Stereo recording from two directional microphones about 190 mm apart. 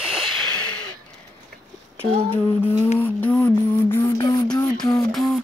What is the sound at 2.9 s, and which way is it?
Music, 10° left (ahead or behind).